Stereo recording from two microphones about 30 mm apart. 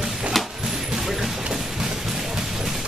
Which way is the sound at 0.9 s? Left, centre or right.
Centre.